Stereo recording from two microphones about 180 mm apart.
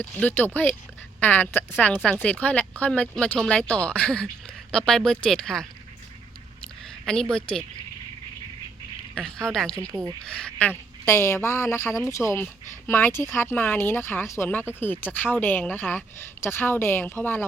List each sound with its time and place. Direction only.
0.0 s a woman's voice: 10° left (ahead or behind)
7.0 s speech: 5° left (ahead or behind)
9.5 s speech: 5° left (ahead or behind)
9.9 s speech: 15° right (ahead or behind)
10.2 s a woman's voice: 5° left (ahead or behind)